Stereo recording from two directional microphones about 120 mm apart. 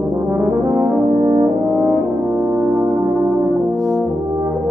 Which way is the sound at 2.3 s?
5° right (ahead or behind).